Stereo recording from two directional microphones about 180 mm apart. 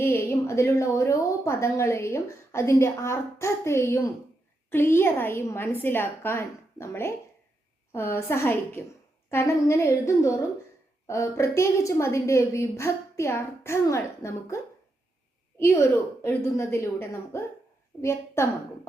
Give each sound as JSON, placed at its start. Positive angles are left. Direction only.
{"t": 0.0, "sound": "a woman's voice", "side_deg": 15}